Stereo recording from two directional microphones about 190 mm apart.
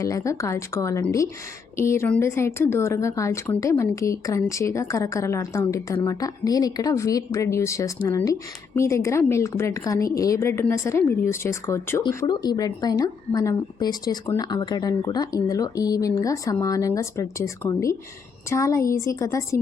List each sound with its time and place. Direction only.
0.0 s speech: 15° left (ahead or behind)